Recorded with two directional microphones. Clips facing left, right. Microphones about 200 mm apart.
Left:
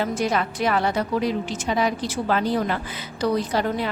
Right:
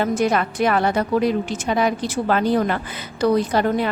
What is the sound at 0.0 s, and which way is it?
A woman's voice, 50° right (ahead or behind).